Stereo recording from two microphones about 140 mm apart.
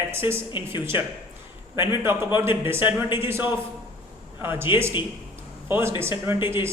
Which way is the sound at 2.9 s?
35° left (ahead or behind).